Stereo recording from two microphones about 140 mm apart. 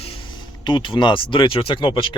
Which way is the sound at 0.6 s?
35° left (ahead or behind).